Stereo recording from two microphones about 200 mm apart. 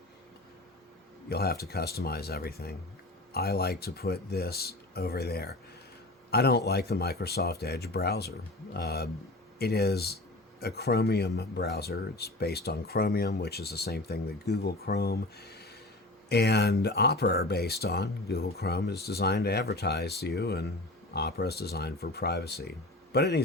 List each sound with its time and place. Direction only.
1.3 s speech: 50° left (ahead or behind)